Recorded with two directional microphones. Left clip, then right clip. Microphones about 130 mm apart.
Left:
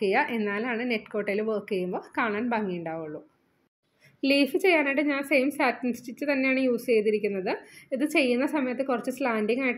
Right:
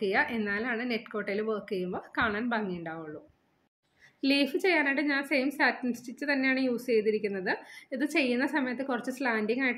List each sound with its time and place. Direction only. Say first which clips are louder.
0.0 s a woman's voice: left 3 dB; 25° left (ahead or behind)
4.2 s a woman's voice: left 4 dB; 20° left (ahead or behind)